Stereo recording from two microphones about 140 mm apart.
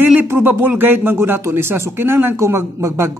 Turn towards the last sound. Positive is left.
turn(degrees=-20)  # may be behind; listen again after turning